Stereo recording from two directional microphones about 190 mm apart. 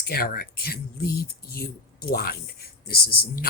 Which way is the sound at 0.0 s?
50° left (ahead or behind).